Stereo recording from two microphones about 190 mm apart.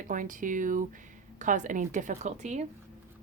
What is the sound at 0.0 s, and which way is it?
A woman's voice, 45° right (ahead or behind).